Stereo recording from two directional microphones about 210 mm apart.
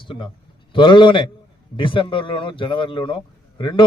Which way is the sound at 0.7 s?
25° left (ahead or behind).